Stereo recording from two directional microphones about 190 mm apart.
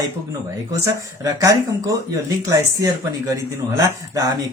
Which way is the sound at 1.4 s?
15° right (ahead or behind).